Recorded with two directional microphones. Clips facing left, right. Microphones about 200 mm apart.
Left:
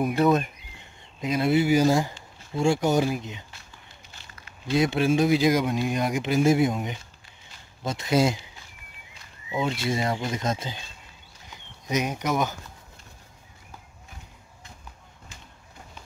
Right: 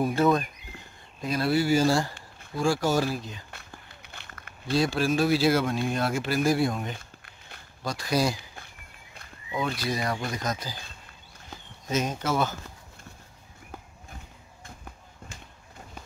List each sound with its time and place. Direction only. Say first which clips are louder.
1.2 s speech: left 3 dB; 20° left (ahead or behind)
3.5 s a sound: right 3 dB; 60° right (ahead or behind)
4.7 s speech: left 3 dB; 20° left (ahead or behind)
7.0 s a sound: right 2 dB; 60° right (ahead or behind)
7.8 s speech: left 3 dB; 25° left (ahead or behind)
9.5 s speech: left 3 dB; 25° left (ahead or behind)
11.9 s speech: left 1 dB; 15° left (ahead or behind)